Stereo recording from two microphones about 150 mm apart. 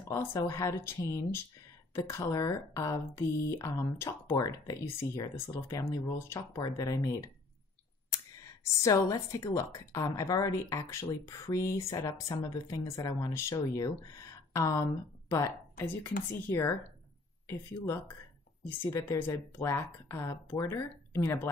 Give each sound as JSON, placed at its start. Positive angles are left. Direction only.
{"t": 0.1, "sound": "a woman's voice", "side_deg": 20}
{"t": 8.8, "sound": "a woman's voice", "side_deg": 20}